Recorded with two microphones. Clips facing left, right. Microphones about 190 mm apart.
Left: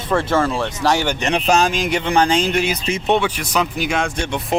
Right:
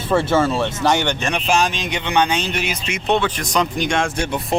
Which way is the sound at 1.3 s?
35° left (ahead or behind).